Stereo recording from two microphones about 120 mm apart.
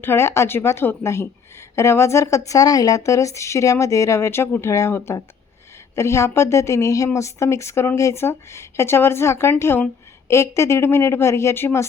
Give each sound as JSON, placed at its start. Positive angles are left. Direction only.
{"t": 0.0, "sound": "speech", "side_deg": 20}